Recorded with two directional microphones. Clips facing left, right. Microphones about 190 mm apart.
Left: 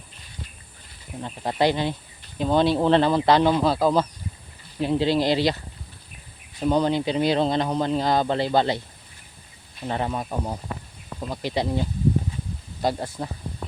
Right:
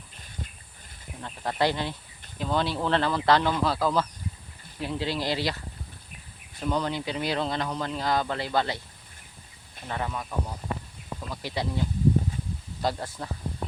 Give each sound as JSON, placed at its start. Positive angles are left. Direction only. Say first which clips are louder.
{"t": 1.2, "sound": "speech", "louder": "left 4 dB", "side_deg": 20}
{"t": 6.6, "sound": "speech", "louder": "left 7 dB", "side_deg": 25}
{"t": 9.8, "sound": "speech", "louder": "left 6 dB", "side_deg": 30}
{"t": 11.3, "sound": "speech", "louder": "left 6 dB", "side_deg": 25}
{"t": 12.8, "sound": "speech", "louder": "left 4 dB", "side_deg": 20}